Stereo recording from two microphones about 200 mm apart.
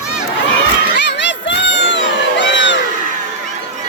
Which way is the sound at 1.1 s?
60° left (ahead or behind).